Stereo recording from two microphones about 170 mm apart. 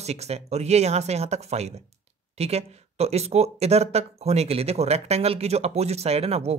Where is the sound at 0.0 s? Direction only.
40° right (ahead or behind).